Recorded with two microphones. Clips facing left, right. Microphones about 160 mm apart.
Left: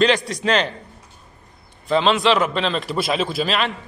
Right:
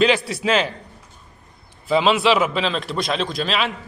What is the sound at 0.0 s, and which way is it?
Speech, 5° right (ahead or behind).